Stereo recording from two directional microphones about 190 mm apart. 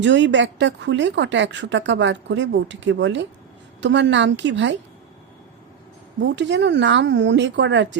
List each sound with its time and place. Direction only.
0.0 s speech: 70° right (ahead or behind)
6.2 s speech: 70° right (ahead or behind)